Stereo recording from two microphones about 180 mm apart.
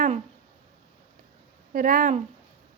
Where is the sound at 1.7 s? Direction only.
50° right (ahead or behind).